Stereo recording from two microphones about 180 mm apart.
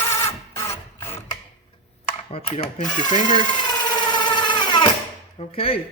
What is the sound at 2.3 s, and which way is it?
Speech, 35° left (ahead or behind).